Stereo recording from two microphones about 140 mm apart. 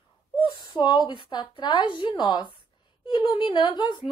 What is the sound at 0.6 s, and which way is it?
A woman's voice, 30° left (ahead or behind).